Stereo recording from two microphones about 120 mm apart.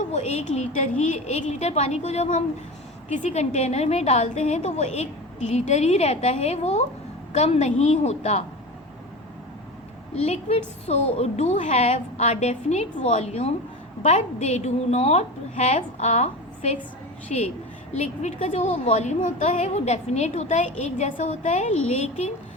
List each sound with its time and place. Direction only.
0.1 s a woman's voice: 65° left (ahead or behind)
10.2 s a woman's voice: 60° left (ahead or behind)